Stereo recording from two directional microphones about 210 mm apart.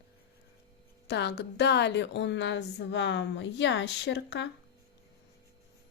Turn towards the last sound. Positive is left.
turn(degrees=55)  # may be behind; listen again after turning